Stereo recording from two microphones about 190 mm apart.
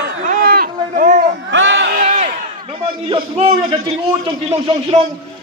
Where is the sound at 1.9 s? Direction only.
40° right (ahead or behind).